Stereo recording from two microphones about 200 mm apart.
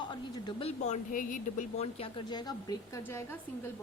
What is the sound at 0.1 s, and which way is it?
A woman's voice, 25° left (ahead or behind).